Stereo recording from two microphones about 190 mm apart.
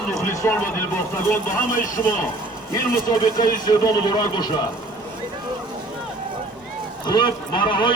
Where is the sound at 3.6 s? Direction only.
20° left (ahead or behind).